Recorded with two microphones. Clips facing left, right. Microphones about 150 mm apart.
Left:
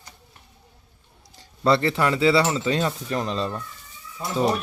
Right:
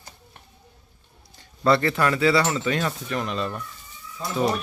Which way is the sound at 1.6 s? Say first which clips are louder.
Even; 25° left (ahead or behind).